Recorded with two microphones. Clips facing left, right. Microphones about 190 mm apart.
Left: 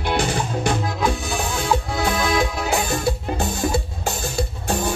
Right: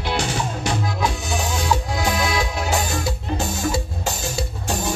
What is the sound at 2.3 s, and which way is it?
Music, 55° left (ahead or behind).